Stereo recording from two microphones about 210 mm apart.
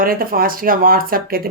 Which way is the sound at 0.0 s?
45° right (ahead or behind).